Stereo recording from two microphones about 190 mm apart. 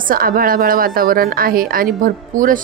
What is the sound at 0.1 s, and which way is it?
A woman's voice, 50° right (ahead or behind).